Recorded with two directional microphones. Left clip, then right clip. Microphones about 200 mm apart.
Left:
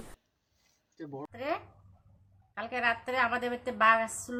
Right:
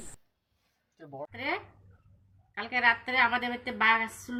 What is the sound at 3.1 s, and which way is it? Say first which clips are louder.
Speech: right 3 dB; 20° left (ahead or behind).